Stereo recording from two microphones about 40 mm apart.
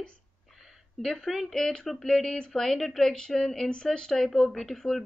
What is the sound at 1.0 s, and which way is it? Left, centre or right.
A woman's voice, centre.